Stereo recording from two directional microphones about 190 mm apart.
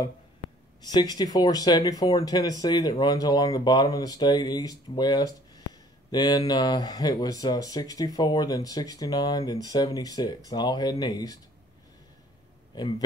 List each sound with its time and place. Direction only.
0.8 s speech: 20° left (ahead or behind)